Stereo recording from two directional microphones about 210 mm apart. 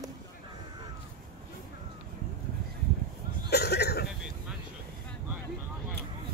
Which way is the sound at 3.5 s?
50° left (ahead or behind).